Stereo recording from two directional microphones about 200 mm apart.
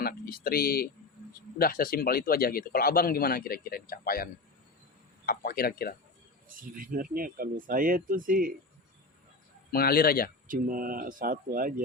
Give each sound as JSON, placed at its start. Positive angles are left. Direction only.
{"t": 0.0, "sound": "a man's voice", "side_deg": 50}
{"t": 6.5, "sound": "speech", "side_deg": -45}
{"t": 9.7, "sound": "a man's voice", "side_deg": 50}
{"t": 10.5, "sound": "speech", "side_deg": -45}